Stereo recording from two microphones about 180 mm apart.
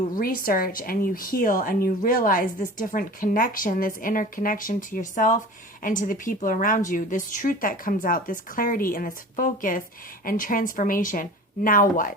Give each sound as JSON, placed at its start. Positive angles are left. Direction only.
{"t": 0.2, "sound": "a woman's voice", "side_deg": 50}